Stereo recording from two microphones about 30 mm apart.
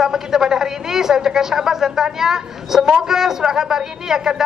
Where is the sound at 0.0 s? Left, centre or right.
Centre.